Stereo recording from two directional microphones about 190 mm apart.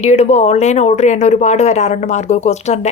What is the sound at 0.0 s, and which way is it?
Speech, 35° left (ahead or behind).